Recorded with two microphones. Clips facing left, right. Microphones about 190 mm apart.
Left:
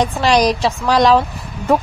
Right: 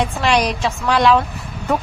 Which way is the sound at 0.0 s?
35° left (ahead or behind).